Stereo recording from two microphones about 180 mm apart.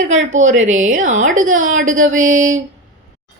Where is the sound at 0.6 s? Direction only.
45° right (ahead or behind).